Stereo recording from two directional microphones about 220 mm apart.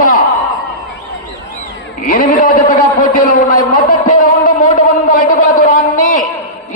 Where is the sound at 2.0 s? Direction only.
35° left (ahead or behind).